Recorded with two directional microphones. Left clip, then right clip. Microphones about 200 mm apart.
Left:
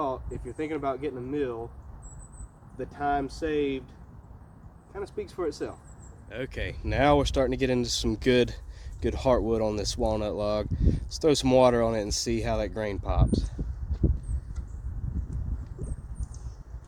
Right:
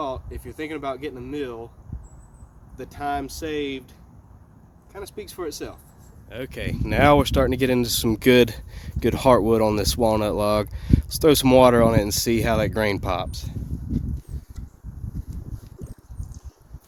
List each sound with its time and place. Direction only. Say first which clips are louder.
0.0 s speech: right 1 dB; 10° right (ahead or behind)
2.7 s speech: right 1 dB; 10° right (ahead or behind)
4.9 s speech: even; 10° right (ahead or behind)
6.8 s speech: right 6 dB; 45° right (ahead or behind); by 13.5 s 65° right (ahead or behind)